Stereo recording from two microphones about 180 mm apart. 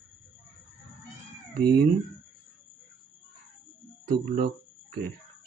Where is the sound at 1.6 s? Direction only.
60° right (ahead or behind).